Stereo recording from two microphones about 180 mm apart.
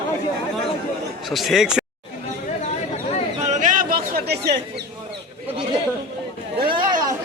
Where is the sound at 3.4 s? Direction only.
45° right (ahead or behind); by 4.5 s 60° right (ahead or behind).